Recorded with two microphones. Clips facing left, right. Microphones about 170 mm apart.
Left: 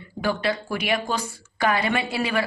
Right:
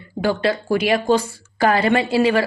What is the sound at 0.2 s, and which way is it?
Speech, 30° right (ahead or behind).